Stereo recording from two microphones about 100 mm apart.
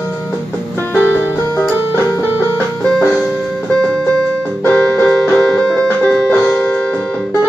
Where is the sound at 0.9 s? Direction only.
20° right (ahead or behind).